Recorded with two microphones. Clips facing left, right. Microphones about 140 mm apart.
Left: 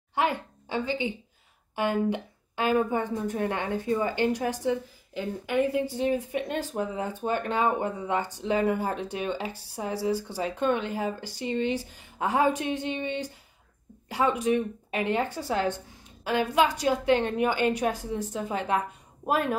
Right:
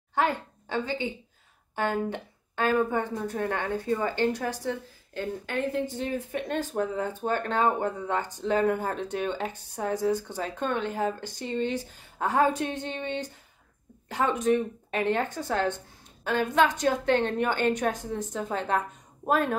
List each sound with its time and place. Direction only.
0.1 s a woman's voice: 15° left (ahead or behind)
12.9 s speech: 50° right (ahead or behind)
14.2 s speech: 50° right (ahead or behind)
14.9 s a woman's voice: 10° left (ahead or behind)